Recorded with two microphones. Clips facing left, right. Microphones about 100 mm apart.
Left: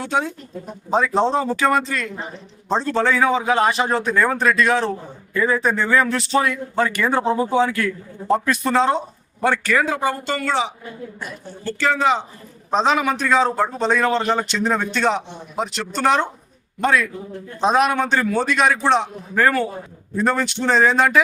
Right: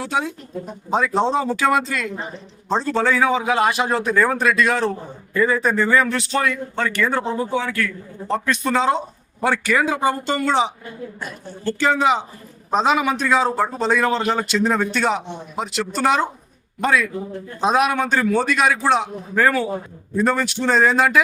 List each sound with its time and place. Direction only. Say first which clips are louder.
0.0 s a man's voice: left 1 dB; 5° right (ahead or behind)
6.8 s speech: left 1 dB; 15° left (ahead or behind)
8.3 s a man's voice: left 2 dB; 5° left (ahead or behind)
9.4 s speech: even; 10° right (ahead or behind)
12.7 s a man's voice: even; 5° right (ahead or behind)